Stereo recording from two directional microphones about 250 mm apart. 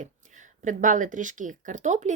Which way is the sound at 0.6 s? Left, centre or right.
Right.